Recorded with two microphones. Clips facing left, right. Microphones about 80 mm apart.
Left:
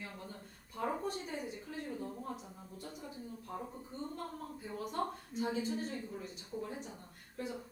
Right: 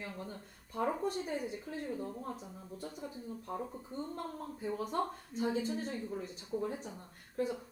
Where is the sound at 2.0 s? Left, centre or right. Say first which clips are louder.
Right 2 dB; centre.